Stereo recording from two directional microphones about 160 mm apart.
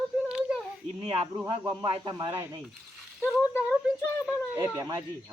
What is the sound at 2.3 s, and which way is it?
Speech, 15° right (ahead or behind).